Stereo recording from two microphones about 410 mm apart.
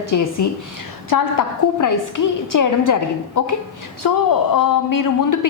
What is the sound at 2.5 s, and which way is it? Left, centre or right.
A woman's voice, left.